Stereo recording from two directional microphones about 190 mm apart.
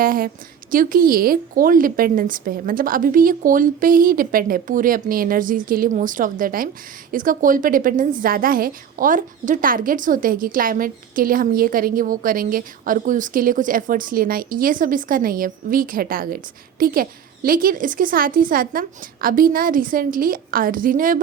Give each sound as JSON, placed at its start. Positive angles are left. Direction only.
{"t": 0.0, "sound": "a woman's voice", "side_deg": -50}